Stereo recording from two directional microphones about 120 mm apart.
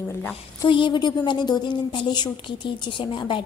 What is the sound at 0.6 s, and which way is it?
A woman's voice, 45° left (ahead or behind).